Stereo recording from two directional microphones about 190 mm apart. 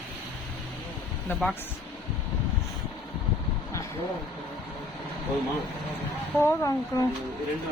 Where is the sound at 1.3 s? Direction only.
Centre (ahead or behind).